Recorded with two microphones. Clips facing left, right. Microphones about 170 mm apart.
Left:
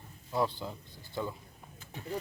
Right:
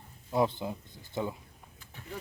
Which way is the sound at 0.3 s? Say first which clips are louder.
Right 3 dB; 20° right (ahead or behind).